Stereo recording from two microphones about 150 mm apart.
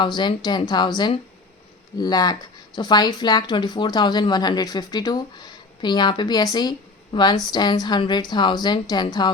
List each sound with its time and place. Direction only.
0.0 s a woman's voice: 30° left (ahead or behind)